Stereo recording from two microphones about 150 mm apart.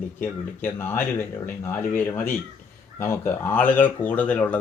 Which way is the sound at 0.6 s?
15° left (ahead or behind).